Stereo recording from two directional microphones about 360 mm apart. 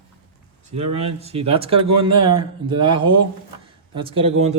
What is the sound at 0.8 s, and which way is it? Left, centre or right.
Speech, centre.